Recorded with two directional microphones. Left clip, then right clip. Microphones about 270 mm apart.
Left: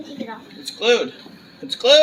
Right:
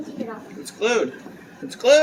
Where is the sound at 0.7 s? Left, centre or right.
Centre.